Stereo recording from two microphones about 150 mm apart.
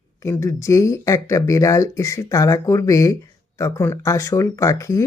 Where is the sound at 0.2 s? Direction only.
20° left (ahead or behind).